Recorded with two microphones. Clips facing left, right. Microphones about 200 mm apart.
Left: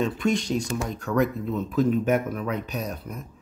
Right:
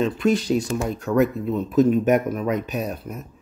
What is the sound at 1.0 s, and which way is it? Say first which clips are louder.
Speech: right 4 dB; 15° right (ahead or behind).